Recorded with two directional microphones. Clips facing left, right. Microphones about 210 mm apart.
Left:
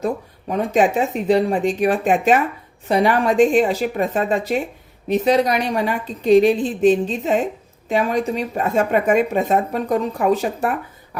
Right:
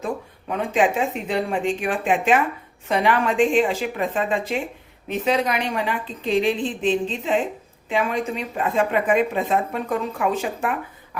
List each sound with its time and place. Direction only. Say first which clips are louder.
0.0 s speech: left 5 dB; 40° left (ahead or behind)